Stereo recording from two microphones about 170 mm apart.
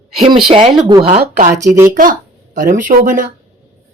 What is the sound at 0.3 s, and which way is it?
Speech, 30° right (ahead or behind).